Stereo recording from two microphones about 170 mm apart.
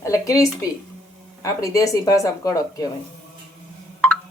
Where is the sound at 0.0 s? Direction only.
20° left (ahead or behind).